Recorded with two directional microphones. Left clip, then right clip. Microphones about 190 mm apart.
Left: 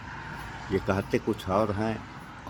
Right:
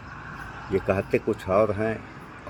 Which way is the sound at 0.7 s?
15° left (ahead or behind).